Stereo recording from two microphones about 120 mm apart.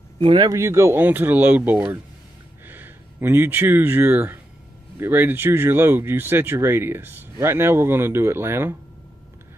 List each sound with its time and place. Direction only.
0.2 s speech: 45° right (ahead or behind)
0.5 s speech: 25° right (ahead or behind)